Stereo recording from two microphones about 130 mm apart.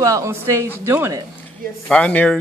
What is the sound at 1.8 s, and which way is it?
Speech, 10° left (ahead or behind).